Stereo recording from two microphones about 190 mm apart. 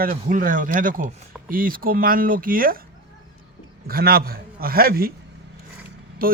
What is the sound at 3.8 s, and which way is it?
Speech, 55° right (ahead or behind).